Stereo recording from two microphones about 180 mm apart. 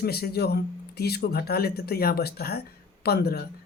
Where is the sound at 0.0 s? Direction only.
60° left (ahead or behind).